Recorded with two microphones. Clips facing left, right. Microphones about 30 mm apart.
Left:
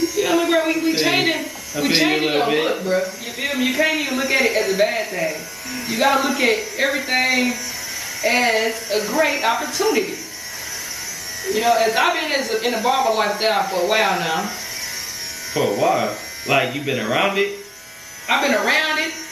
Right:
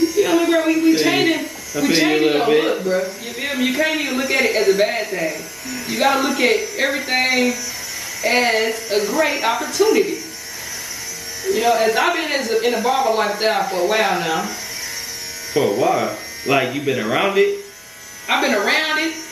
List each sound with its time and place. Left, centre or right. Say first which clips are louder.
0.0 s a sound: right 3 dB; centre
2.0 s a man's voice: right 2 dB; centre
11.4 s a man's voice: right 1 dB; centre
15.5 s a man's voice: right 1 dB; centre